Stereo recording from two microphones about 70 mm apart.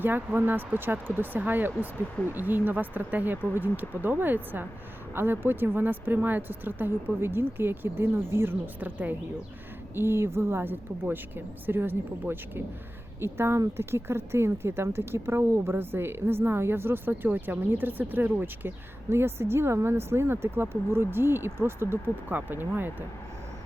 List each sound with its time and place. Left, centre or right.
0.0 s a woman's voice: right